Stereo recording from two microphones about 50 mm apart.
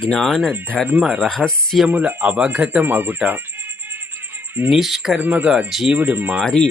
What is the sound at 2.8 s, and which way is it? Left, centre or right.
Speech, right.